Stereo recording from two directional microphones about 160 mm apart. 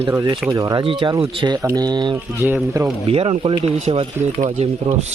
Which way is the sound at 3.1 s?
35° right (ahead or behind).